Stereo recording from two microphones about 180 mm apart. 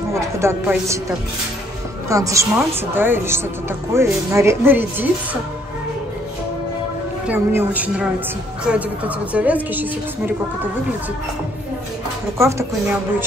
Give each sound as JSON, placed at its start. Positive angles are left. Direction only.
{"t": 0.1, "sound": "speech", "side_deg": -15}
{"t": 2.0, "sound": "a woman's voice", "side_deg": -20}
{"t": 7.2, "sound": "a woman's voice", "side_deg": -10}
{"t": 12.4, "sound": "a woman's voice", "side_deg": -15}